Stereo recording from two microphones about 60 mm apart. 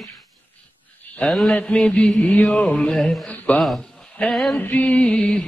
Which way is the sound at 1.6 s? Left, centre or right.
Centre.